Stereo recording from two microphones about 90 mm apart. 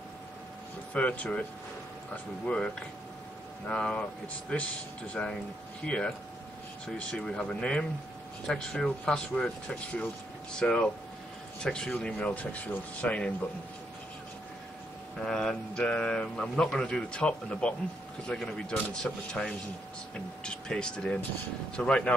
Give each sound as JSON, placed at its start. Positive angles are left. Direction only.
{"t": 0.9, "sound": "speech", "side_deg": 15}
{"t": 2.4, "sound": "speech", "side_deg": 15}
{"t": 15.2, "sound": "speech", "side_deg": 5}